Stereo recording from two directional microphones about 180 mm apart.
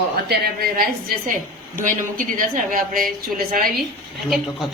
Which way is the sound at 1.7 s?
50° right (ahead or behind).